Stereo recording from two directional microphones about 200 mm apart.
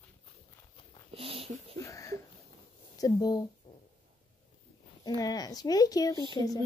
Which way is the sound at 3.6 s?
25° left (ahead or behind).